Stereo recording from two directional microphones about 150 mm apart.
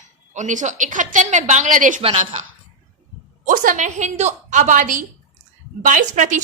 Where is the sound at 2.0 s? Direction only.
40° right (ahead or behind).